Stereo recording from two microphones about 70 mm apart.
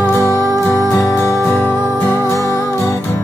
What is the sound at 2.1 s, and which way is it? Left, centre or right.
Music, left.